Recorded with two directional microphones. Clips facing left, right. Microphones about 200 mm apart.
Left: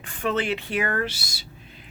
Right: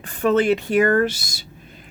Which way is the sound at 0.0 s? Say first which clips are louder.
Right 8 dB; 40° right (ahead or behind).